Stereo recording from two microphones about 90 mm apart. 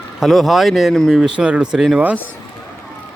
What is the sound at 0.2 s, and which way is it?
Speech, centre (ahead or behind).